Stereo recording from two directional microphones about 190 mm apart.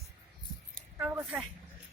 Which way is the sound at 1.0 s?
5° right (ahead or behind).